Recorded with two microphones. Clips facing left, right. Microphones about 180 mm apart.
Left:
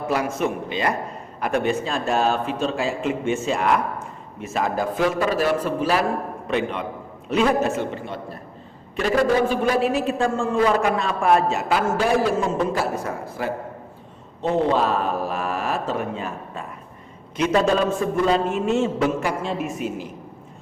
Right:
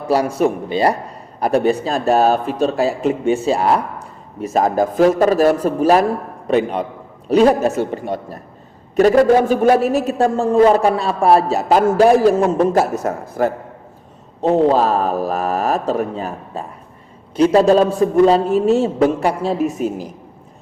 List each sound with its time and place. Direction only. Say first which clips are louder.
0.1 s a man's voice: right 8 dB; 35° right (ahead or behind)